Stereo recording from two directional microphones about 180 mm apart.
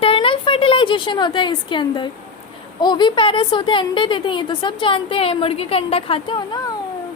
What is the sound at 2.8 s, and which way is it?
A woman's voice, 25° left (ahead or behind).